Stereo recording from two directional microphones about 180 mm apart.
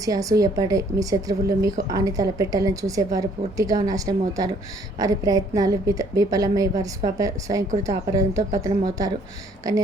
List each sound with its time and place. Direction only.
0.0 s a woman's voice: 20° right (ahead or behind)